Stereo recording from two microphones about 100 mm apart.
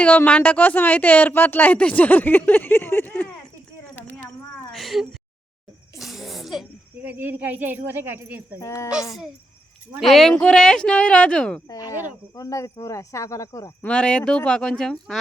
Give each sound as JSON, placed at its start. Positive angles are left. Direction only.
{"t": 0.0, "sound": "speech", "side_deg": 15}
{"t": 4.7, "sound": "a sound", "side_deg": 0}
{"t": 7.0, "sound": "speech", "side_deg": -20}
{"t": 8.6, "sound": "speech", "side_deg": 30}
{"t": 10.0, "sound": "speech", "side_deg": 0}
{"t": 12.4, "sound": "speech", "side_deg": 35}
{"t": 13.8, "sound": "speech", "side_deg": 10}